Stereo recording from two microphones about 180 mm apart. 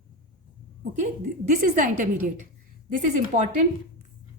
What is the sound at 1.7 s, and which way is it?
Speech, 45° right (ahead or behind).